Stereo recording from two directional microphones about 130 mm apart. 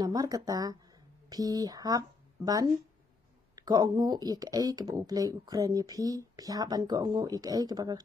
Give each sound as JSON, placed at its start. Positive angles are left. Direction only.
{"t": 0.0, "sound": "speech", "side_deg": -30}